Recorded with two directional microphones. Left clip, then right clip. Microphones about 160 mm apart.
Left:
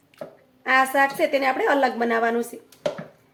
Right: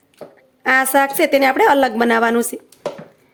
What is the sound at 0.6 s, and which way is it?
A woman's voice, 90° right.